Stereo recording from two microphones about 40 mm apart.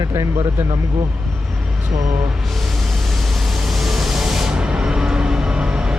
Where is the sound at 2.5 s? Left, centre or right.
Centre.